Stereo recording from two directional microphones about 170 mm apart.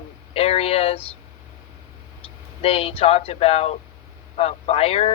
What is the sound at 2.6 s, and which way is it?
Speech, 35° left (ahead or behind).